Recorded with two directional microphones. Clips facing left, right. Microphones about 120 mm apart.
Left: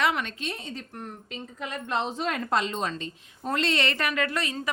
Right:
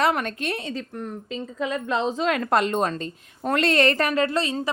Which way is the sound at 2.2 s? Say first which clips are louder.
Right 6 dB; 85° right.